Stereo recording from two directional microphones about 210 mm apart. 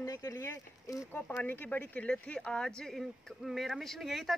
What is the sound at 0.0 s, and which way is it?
Speech, 15° left (ahead or behind).